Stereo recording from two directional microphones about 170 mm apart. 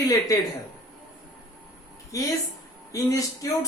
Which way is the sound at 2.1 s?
20° left (ahead or behind).